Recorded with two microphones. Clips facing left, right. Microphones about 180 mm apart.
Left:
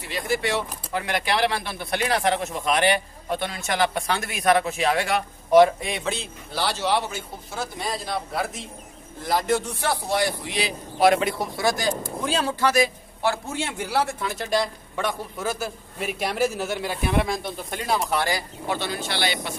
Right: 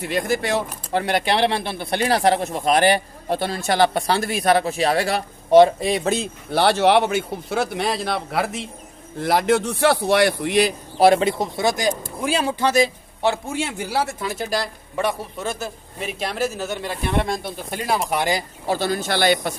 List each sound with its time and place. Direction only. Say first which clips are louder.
0.0 s speech: right 4 dB; 50° right (ahead or behind)
6.5 s a man's voice: right 8 dB; 60° right (ahead or behind)
11.0 s speech: right 4 dB; 30° right (ahead or behind)
14.2 s a man's voice: even; 5° right (ahead or behind)
17.4 s speech: right 2 dB; 5° right (ahead or behind)
18.7 s speech: right 6 dB; 40° right (ahead or behind)